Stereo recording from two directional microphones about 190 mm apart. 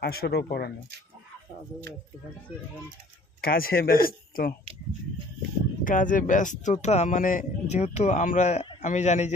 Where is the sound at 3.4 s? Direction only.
50° left (ahead or behind).